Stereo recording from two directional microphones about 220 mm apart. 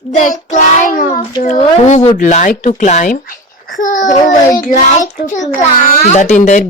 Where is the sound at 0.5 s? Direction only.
35° left (ahead or behind).